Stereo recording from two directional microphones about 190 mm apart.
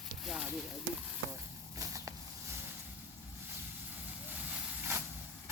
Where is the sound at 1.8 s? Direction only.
15° right (ahead or behind).